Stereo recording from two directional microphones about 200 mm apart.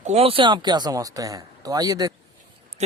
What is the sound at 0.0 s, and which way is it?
Speech, 30° right (ahead or behind).